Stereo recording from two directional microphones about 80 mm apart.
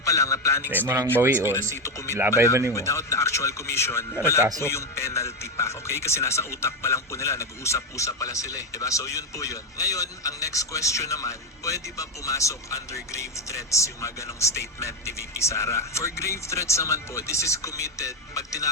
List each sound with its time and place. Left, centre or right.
0.0 s speech: left
0.7 s speech: right
1.7 s speech: left
2.5 s speech: right
2.7 s speech: left